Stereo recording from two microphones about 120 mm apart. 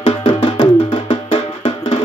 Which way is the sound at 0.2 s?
45° left (ahead or behind).